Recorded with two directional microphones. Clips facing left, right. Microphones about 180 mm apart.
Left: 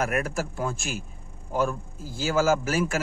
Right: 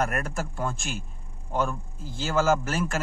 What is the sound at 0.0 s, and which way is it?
A man's voice, 5° left (ahead or behind).